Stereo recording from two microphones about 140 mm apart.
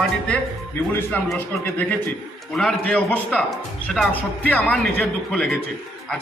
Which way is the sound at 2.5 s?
5° left (ahead or behind).